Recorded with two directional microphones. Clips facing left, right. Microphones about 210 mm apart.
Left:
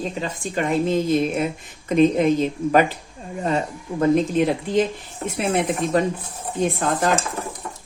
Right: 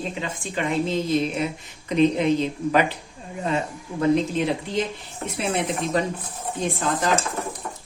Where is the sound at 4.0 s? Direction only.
50° left (ahead or behind).